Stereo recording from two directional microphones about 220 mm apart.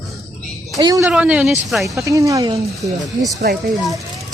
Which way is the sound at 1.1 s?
5° right (ahead or behind).